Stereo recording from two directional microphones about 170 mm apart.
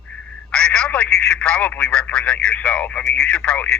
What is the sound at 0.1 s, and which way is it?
Speech, 5° left (ahead or behind).